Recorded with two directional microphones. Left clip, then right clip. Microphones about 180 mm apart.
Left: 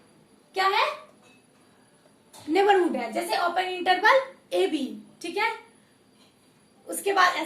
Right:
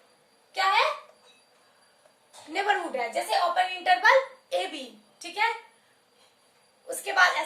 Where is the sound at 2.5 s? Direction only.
10° left (ahead or behind).